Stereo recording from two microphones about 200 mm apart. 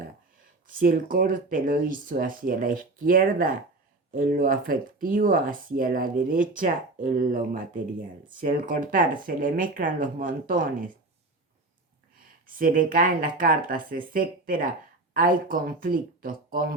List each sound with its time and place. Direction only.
0.7 s speech: 45° right (ahead or behind)
12.5 s speech: 45° right (ahead or behind)